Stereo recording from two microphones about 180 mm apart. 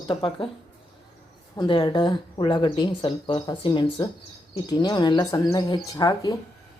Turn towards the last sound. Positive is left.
turn(degrees=20)  # may be behind; listen again after turning